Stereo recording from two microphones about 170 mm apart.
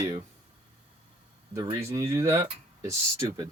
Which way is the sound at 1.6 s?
30° right (ahead or behind).